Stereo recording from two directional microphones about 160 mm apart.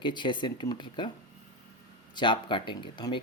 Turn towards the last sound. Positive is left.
turn(degrees=30)  # may be behind; listen again after turning